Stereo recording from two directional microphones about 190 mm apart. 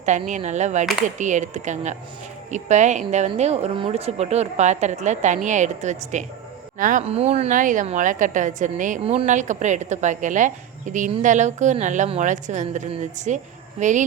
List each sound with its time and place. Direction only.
0.0 s a woman's voice: 40° right (ahead or behind)